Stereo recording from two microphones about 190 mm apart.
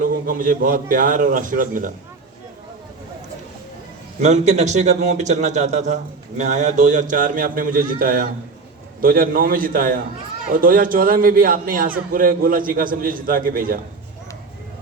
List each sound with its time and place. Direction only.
0.0 s a man's voice: 45° right (ahead or behind)
4.2 s a man's voice: 35° right (ahead or behind)